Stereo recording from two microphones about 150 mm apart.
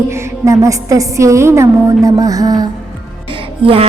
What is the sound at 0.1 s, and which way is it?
A woman's voice, 20° right (ahead or behind).